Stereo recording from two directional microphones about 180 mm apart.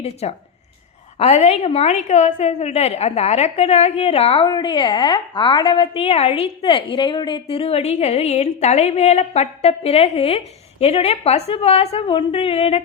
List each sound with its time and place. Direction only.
0.0 s a woman's voice: 35° left (ahead or behind)